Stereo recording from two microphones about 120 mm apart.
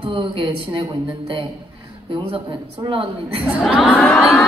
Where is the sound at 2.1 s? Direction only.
45° right (ahead or behind).